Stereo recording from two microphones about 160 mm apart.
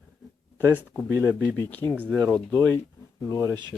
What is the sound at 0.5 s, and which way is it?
Speech, 10° left (ahead or behind).